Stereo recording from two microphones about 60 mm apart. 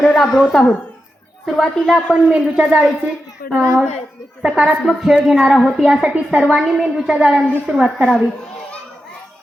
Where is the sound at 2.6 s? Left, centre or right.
Right.